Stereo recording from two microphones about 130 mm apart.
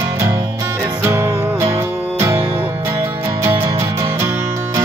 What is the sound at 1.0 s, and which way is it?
Music, 20° right (ahead or behind).